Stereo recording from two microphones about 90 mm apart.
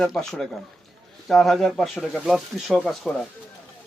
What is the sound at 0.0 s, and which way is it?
Speech, 5° left (ahead or behind).